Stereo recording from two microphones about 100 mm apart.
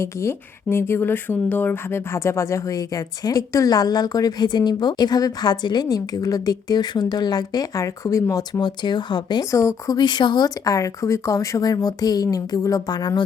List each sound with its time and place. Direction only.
0.0 s speech: 30° left (ahead or behind); by 9.4 s 50° left (ahead or behind)
9.4 s speech: 30° left (ahead or behind)
10.0 s speech: 50° left (ahead or behind)